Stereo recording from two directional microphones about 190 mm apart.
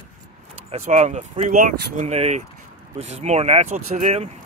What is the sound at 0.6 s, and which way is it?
Speech, 35° right (ahead or behind).